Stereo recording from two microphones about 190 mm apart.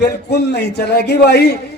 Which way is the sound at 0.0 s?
60° left (ahead or behind).